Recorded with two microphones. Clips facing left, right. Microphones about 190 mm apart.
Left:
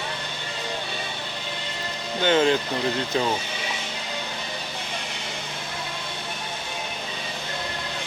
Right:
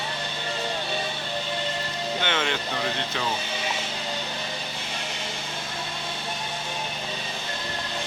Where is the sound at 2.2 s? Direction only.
35° left (ahead or behind).